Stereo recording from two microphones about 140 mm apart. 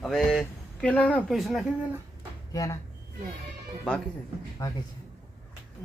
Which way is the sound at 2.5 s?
25° left (ahead or behind).